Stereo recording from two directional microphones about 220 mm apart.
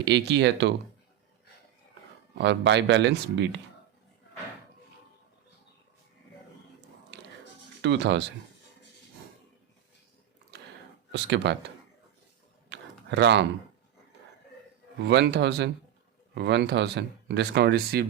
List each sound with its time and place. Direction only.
0.0 s speech: 50° right (ahead or behind)
2.4 s speech: 55° right (ahead or behind)
7.1 s music: 50° right (ahead or behind)
7.8 s speech: 55° right (ahead or behind)
11.1 s speech: 55° right (ahead or behind)
12.7 s a sound: 50° right (ahead or behind)
15.0 s speech: 50° right (ahead or behind)